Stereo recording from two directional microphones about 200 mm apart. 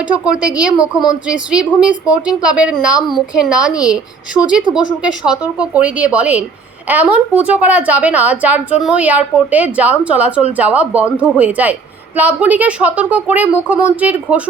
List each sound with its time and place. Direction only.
0.1 s speech: 5° right (ahead or behind)
3.7 s a woman's voice: 20° left (ahead or behind)
5.2 s a woman's voice: 5° right (ahead or behind)